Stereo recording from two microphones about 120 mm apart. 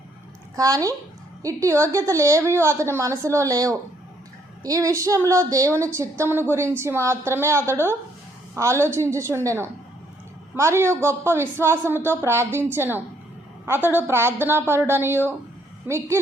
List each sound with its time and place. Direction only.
0.5 s a woman's voice: 30° right (ahead or behind)